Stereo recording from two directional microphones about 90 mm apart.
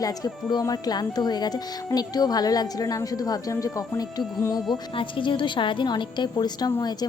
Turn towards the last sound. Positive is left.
turn(degrees=50)  # may be behind; listen again after turning